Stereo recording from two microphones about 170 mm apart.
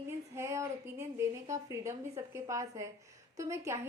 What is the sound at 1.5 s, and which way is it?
A woman's voice, 15° right (ahead or behind).